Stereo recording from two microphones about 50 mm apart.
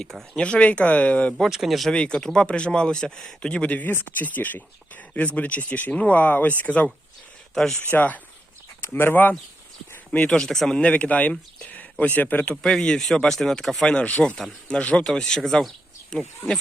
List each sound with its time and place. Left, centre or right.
0.0 s speech: centre
0.3 s speech: left
1.5 s speech: centre
1.9 s speech: centre
3.4 s speech: left
7.5 s speech: centre
7.8 s speech: left
8.8 s speech: left
10.1 s speech: left
10.4 s speech: centre
10.8 s speech: left
12.6 s speech: centre
14.0 s speech: left
15.0 s speech: centre